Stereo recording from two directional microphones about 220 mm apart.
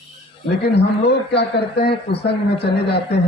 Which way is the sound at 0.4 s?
50° left (ahead or behind).